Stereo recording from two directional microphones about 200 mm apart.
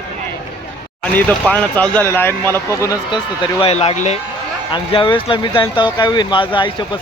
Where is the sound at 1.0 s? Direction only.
5° left (ahead or behind).